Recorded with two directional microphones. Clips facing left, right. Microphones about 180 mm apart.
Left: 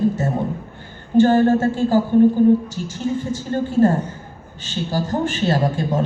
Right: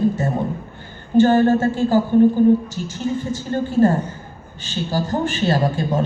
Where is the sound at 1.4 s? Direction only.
30° left (ahead or behind).